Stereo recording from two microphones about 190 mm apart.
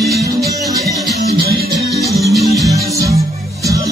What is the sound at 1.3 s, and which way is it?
Music, 50° right (ahead or behind).